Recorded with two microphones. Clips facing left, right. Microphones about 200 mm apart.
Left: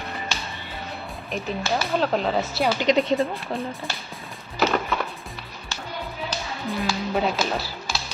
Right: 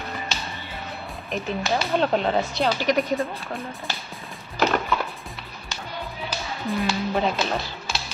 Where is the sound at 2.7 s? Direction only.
25° left (ahead or behind).